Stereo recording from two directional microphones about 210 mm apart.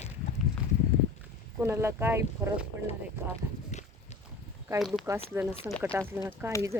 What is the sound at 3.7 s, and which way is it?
Horse, 35° left (ahead or behind).